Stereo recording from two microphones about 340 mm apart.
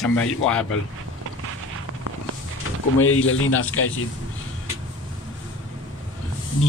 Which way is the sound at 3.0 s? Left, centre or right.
Left.